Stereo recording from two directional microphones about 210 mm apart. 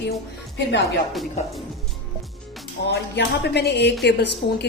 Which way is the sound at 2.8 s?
50° left (ahead or behind).